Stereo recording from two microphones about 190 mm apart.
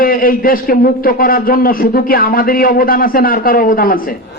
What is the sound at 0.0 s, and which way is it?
A man's voice, 50° left (ahead or behind).